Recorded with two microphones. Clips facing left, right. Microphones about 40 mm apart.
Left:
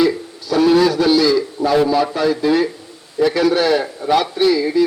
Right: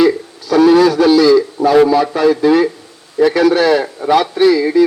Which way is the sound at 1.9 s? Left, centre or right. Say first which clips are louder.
Right 4 dB; right.